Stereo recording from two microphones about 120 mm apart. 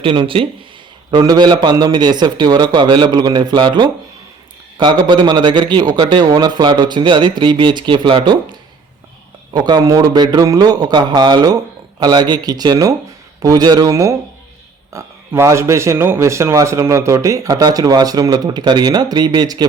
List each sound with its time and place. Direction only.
0.0 s a man's voice: 45° right (ahead or behind)
9.5 s a man's voice: 35° right (ahead or behind)